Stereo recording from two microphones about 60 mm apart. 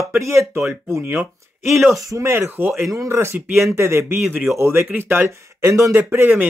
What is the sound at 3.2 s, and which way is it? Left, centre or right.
Speech, right.